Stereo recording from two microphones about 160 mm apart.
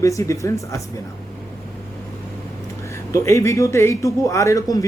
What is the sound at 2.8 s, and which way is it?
A man's voice, 20° left (ahead or behind).